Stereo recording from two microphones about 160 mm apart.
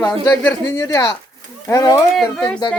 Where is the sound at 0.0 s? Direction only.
15° left (ahead or behind).